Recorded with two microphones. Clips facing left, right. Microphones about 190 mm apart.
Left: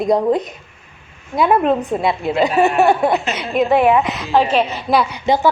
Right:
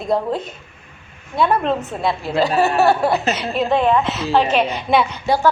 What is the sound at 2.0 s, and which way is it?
Speech, centre (ahead or behind).